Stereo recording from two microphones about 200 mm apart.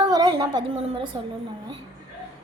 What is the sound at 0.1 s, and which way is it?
A woman's voice, 20° right (ahead or behind).